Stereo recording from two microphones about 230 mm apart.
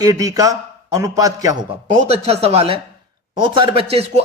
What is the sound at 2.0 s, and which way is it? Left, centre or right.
Speech, right.